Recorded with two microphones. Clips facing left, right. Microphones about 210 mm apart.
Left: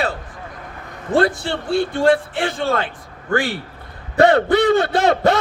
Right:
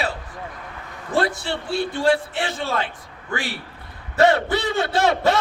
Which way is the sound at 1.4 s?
50° left (ahead or behind).